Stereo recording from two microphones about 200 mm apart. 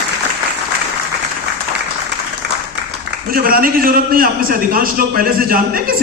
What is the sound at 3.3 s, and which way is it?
A man's voice, 45° right (ahead or behind).